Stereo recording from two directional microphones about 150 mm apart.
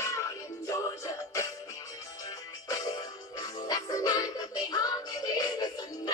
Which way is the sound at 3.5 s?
25° left (ahead or behind).